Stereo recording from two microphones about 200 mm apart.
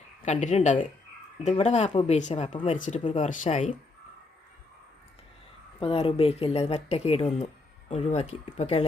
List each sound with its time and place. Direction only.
0.3 s speech: 35° left (ahead or behind)
5.8 s speech: 30° left (ahead or behind)